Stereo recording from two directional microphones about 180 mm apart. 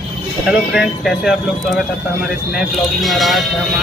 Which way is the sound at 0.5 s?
Centre (ahead or behind).